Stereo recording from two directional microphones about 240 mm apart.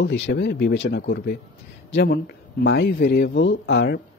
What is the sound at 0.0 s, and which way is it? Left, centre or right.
A man's voice, left.